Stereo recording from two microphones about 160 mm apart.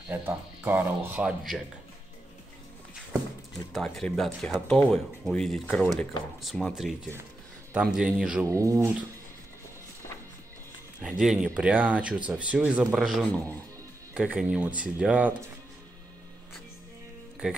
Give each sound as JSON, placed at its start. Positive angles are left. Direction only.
{"t": 0.1, "sound": "speech", "side_deg": -10}
{"t": 3.7, "sound": "speech", "side_deg": 5}
{"t": 8.5, "sound": "speech", "side_deg": -20}
{"t": 11.0, "sound": "speech", "side_deg": -5}